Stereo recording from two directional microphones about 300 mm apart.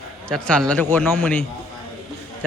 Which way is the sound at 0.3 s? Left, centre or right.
Centre.